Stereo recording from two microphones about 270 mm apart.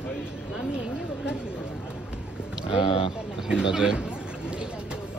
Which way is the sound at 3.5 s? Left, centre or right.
Centre.